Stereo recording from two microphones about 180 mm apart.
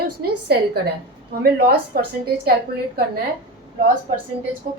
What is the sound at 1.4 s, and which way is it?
Speech, 60° right (ahead or behind).